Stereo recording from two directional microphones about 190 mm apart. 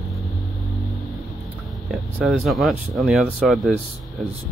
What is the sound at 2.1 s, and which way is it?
Speech, centre (ahead or behind).